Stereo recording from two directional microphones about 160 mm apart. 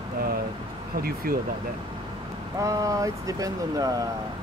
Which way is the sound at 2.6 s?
20° right (ahead or behind).